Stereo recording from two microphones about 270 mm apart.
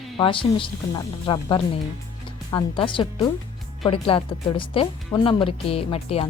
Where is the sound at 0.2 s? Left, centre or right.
Centre.